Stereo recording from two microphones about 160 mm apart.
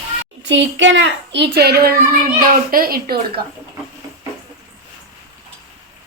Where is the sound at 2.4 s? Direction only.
65° right (ahead or behind).